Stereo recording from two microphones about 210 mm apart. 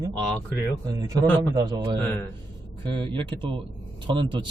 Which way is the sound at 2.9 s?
25° right (ahead or behind).